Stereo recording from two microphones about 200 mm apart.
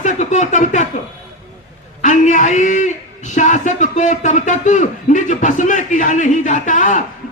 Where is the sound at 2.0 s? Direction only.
40° left (ahead or behind).